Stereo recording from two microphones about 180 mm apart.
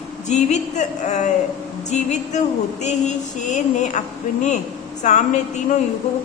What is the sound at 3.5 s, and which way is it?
Speech, 40° left (ahead or behind).